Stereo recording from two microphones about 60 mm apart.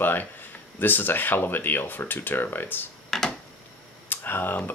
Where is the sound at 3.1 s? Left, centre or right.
Centre.